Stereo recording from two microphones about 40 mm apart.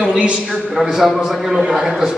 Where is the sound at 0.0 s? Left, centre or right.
Right.